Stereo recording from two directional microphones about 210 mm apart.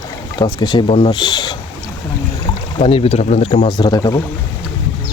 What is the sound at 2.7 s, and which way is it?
Speech, 25° left (ahead or behind).